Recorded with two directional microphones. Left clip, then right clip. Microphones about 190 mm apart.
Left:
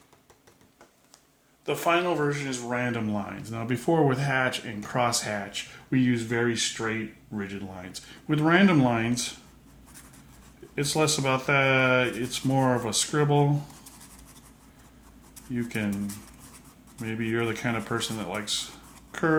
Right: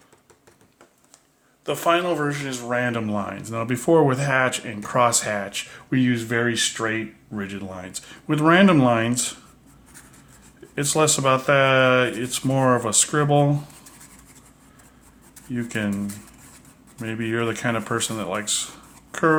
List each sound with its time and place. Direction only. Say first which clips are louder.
1.6 s speech: right 4 dB; 35° right (ahead or behind)
10.8 s speech: right 5 dB; 40° right (ahead or behind)
15.5 s speech: right 4 dB; 35° right (ahead or behind)
17.0 s speech: right 4 dB; 35° right (ahead or behind)